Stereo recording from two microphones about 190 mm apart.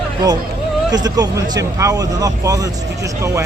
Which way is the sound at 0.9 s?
20° right (ahead or behind).